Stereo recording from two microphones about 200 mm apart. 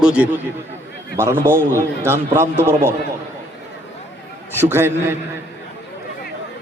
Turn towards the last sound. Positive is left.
turn(degrees=-10)  # may be behind; listen again after turning